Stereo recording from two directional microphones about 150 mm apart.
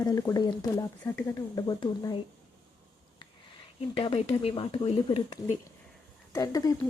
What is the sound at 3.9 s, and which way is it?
Speech, 40° left (ahead or behind).